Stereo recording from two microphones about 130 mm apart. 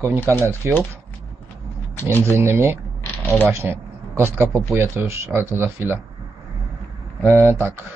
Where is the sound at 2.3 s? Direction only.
20° right (ahead or behind).